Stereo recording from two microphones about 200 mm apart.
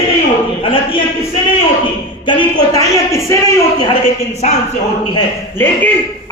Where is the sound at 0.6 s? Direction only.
25° left (ahead or behind).